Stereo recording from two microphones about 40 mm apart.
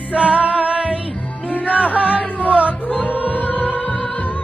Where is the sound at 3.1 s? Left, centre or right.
Left.